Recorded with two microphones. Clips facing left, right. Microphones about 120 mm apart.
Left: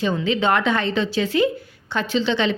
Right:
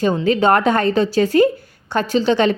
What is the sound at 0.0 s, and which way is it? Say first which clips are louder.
A woman's voice: right 5 dB; 40° right (ahead or behind).